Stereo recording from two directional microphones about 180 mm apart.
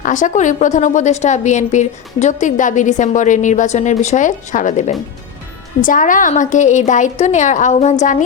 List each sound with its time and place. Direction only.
0.0 s a woman's voice: 45° left (ahead or behind)